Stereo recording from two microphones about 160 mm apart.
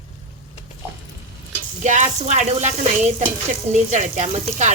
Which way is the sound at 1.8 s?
45° right (ahead or behind).